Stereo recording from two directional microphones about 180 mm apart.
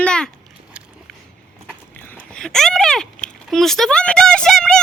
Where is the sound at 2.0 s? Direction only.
10° left (ahead or behind).